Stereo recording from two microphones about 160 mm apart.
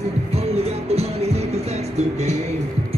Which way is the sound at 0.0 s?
40° right (ahead or behind).